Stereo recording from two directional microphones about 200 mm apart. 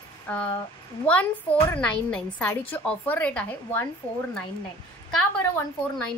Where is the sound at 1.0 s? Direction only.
5° left (ahead or behind).